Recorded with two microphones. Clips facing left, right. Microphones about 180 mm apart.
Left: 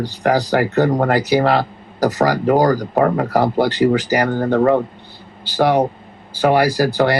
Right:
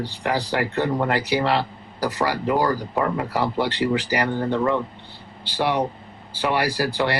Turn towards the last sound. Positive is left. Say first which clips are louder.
# left 7 dB
turn(degrees=40)  # may be behind; listen again after turning